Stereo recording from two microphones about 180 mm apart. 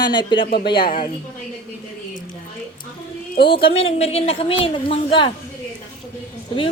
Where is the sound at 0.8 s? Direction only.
50° left (ahead or behind).